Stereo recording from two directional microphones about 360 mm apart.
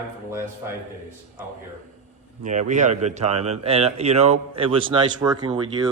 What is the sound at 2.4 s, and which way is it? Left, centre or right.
Speech, right.